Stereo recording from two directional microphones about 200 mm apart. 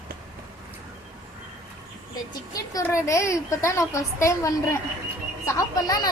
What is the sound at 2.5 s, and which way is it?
A woman's voice, 15° left (ahead or behind).